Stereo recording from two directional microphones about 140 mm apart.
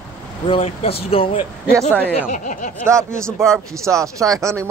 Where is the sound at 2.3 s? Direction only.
65° left (ahead or behind).